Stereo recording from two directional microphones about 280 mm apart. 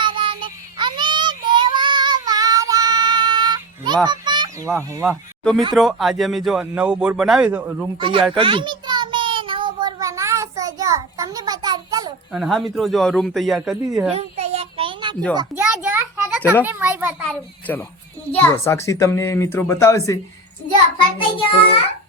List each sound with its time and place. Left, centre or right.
0.0 s child singing: centre
4.0 s speech: centre
5.4 s speech: centre
7.9 s a sound: centre
12.3 s speech: centre
14.1 s a sound: right
15.4 s a sound: centre
18.3 s a child's voice: centre
21.2 s a child's voice: centre